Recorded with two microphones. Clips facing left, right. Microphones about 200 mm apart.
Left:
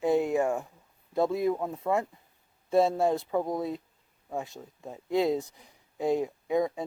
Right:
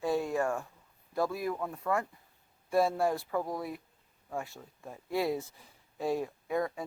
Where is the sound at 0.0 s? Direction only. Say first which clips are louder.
Left 5 dB; 20° left (ahead or behind).